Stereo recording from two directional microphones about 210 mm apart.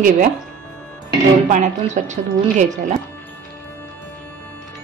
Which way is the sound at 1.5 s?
35° right (ahead or behind).